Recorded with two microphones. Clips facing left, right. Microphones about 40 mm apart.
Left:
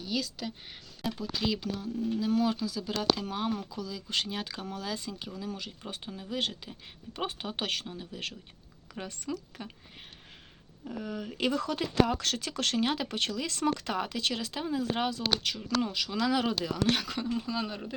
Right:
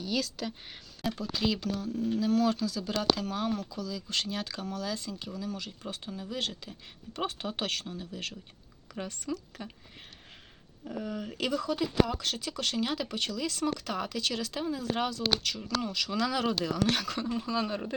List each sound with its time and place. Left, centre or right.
0.0 s speech: centre; by 8.4 s left
9.3 s speech: centre
10.8 s speech: centre
11.5 s speech: left
12.2 s speech: left
12.5 s speech: left
13.9 s speech: left
16.0 s speech: centre
17.2 s speech: centre